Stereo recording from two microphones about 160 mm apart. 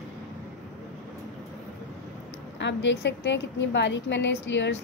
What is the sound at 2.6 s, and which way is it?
A woman's voice, 90° left.